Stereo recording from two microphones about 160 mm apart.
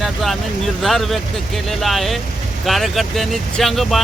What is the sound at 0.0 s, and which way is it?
Vehicle, centre (ahead or behind).